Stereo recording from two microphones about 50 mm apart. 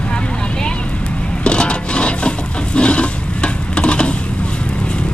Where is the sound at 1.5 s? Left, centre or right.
Left.